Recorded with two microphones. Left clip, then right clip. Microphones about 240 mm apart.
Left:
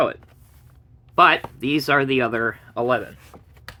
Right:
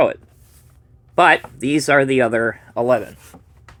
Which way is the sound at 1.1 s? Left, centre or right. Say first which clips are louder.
Right 2 dB; centre.